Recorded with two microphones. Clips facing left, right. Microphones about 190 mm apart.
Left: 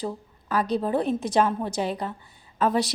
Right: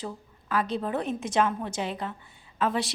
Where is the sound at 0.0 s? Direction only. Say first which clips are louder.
Left 5 dB; 40° left (ahead or behind).